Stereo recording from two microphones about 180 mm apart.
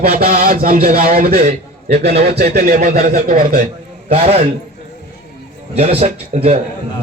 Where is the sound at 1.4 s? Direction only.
35° right (ahead or behind).